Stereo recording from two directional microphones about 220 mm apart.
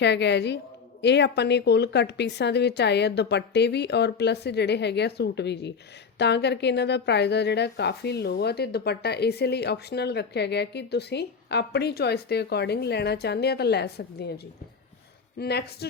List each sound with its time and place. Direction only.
0.0 s a woman's voice: 50° left (ahead or behind)